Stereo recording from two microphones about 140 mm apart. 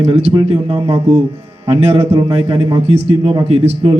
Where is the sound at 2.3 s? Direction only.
35° right (ahead or behind).